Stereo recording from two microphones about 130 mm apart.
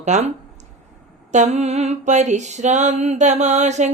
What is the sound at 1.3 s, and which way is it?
Mantra, 60° right (ahead or behind).